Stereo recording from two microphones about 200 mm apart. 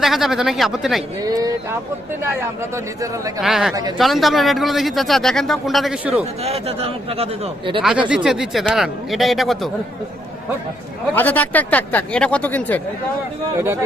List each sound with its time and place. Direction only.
0.0 s speech: centre (ahead or behind)
1.2 s speech: 15° right (ahead or behind)
3.4 s speech: centre (ahead or behind)
6.4 s speech: 30° right (ahead or behind)
7.8 s speech: 5° right (ahead or behind)
11.1 s speech: 10° left (ahead or behind)